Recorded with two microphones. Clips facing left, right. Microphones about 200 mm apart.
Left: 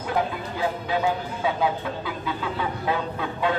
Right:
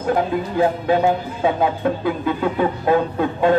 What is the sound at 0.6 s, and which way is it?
Speech, 50° right (ahead or behind).